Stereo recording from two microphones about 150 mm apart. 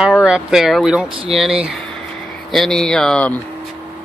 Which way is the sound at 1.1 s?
35° right (ahead or behind).